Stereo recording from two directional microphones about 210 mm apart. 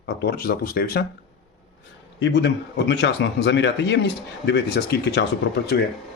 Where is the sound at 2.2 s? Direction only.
55° left (ahead or behind).